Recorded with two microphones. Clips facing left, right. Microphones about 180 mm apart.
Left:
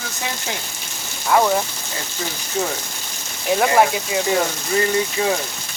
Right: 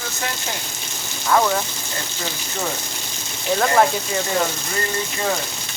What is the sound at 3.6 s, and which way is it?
Speech, 10° left (ahead or behind).